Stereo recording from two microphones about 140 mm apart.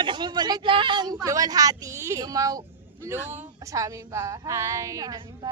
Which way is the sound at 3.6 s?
25° right (ahead or behind).